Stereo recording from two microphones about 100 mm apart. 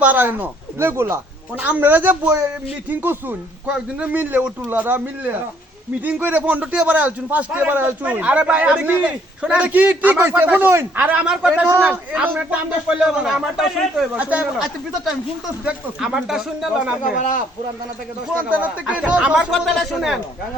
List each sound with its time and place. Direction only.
0.0 s speech: 15° right (ahead or behind)
1.5 s a man's voice: 15° right (ahead or behind); by 14.1 s centre (ahead or behind)
14.2 s a man's voice: 15° right (ahead or behind)
18.3 s a man's voice: 15° right (ahead or behind)